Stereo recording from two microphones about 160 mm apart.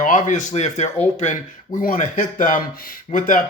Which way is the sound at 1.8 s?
60° left (ahead or behind).